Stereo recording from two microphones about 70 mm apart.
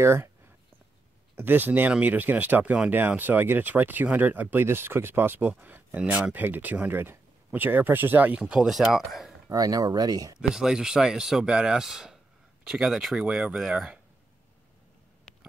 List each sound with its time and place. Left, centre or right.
0.0 s speech: right
1.3 s speech: right
8.4 s speech: centre
9.5 s speech: right
10.5 s speech: centre
15.3 s a sound: centre